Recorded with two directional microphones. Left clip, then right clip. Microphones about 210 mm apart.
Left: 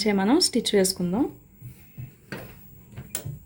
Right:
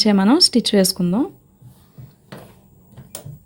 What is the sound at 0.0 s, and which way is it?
Speech, 45° right (ahead or behind).